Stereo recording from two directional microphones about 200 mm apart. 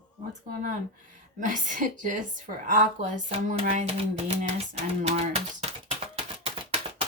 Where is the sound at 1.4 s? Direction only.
40° right (ahead or behind).